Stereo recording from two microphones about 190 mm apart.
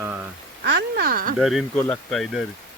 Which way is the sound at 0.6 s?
50° right (ahead or behind).